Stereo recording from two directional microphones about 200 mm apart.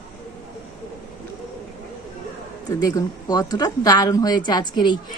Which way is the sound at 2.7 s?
15° left (ahead or behind).